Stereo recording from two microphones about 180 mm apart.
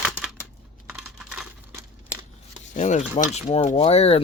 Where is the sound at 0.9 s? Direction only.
Centre (ahead or behind).